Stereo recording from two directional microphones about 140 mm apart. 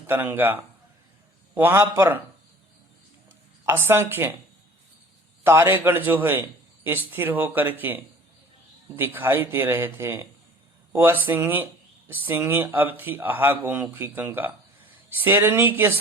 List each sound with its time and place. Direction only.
0.1 s speech: 15° right (ahead or behind)
3.7 s speech: 15° right (ahead or behind)
5.4 s speech: 15° right (ahead or behind)